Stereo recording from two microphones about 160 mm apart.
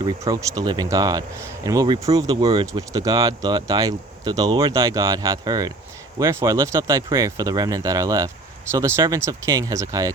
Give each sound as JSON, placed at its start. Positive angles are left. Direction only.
{"t": 0.0, "sound": "speech", "side_deg": -20}